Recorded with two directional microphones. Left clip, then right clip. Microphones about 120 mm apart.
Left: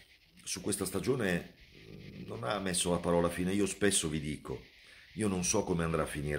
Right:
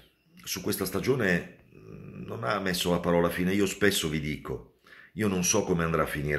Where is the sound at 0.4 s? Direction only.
30° left (ahead or behind).